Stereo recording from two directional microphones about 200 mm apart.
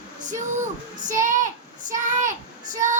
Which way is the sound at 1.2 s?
40° right (ahead or behind).